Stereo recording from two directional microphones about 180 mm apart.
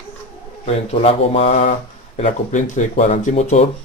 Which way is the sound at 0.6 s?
35° left (ahead or behind).